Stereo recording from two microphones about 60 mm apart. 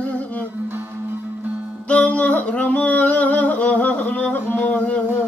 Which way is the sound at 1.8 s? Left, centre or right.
Left.